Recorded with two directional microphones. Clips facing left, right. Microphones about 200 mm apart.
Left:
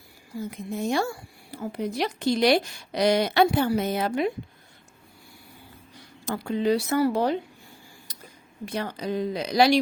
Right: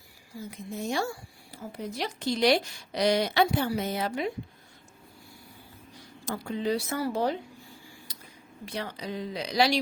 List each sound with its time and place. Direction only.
0.5 s speech: 60° left (ahead or behind)
6.2 s speech: 70° left (ahead or behind)
8.6 s speech: 50° left (ahead or behind)